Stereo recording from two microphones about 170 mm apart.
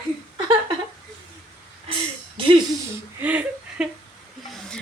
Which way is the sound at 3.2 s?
10° right (ahead or behind).